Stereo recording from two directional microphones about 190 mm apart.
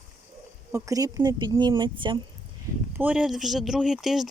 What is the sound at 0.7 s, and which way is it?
Speech, 15° right (ahead or behind).